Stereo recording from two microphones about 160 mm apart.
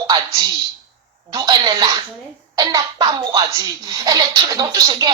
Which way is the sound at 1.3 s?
25° right (ahead or behind).